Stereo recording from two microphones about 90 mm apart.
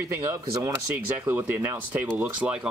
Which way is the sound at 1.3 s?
20° right (ahead or behind).